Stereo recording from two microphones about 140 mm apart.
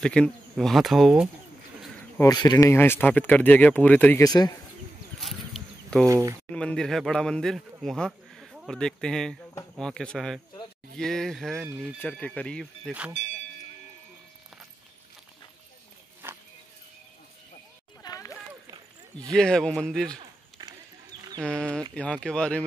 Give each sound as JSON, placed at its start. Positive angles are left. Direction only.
{"t": 0.0, "sound": "speech", "side_deg": 5}
{"t": 2.2, "sound": "speech", "side_deg": 30}
{"t": 4.2, "sound": "speech", "side_deg": 25}
{"t": 5.2, "sound": "a sound", "side_deg": 0}
{"t": 6.0, "sound": "speech", "side_deg": -20}
{"t": 6.5, "sound": "speech", "side_deg": 5}
{"t": 13.2, "sound": "speech", "side_deg": 55}
{"t": 16.2, "sound": "a sound", "side_deg": -15}
{"t": 18.0, "sound": "a sound", "side_deg": 25}
{"t": 19.3, "sound": "speech", "side_deg": 5}
{"t": 20.1, "sound": "a sound", "side_deg": -30}
{"t": 21.5, "sound": "speech", "side_deg": 5}